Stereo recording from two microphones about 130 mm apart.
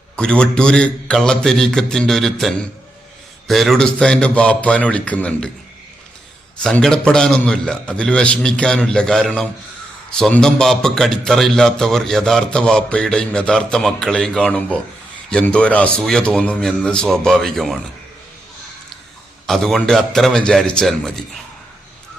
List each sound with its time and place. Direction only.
0.2 s a man's voice: 5° left (ahead or behind)
6.6 s a man's voice: 5° left (ahead or behind)
19.5 s a man's voice: centre (ahead or behind)